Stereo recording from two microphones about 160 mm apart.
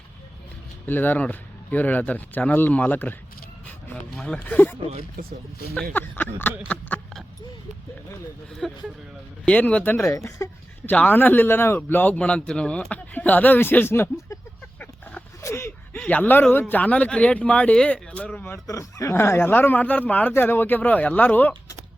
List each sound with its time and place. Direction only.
0.9 s speech: 10° left (ahead or behind)
4.2 s speech: 5° left (ahead or behind)
5.2 s speech: 65° right (ahead or behind)
5.9 s a sound: 10° left (ahead or behind)
8.6 s speech: centre (ahead or behind)